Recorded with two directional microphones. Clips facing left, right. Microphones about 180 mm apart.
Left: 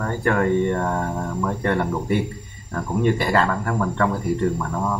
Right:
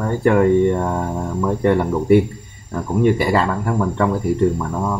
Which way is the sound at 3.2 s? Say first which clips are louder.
Right 2 dB; 10° right (ahead or behind).